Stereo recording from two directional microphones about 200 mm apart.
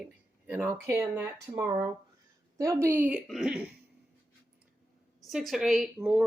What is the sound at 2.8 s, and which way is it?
Speech, 10° right (ahead or behind).